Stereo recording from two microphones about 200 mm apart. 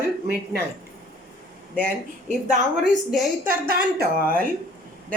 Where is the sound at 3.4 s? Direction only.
50° right (ahead or behind).